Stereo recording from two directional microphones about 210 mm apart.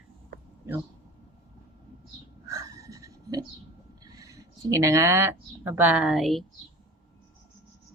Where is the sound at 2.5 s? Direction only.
15° right (ahead or behind).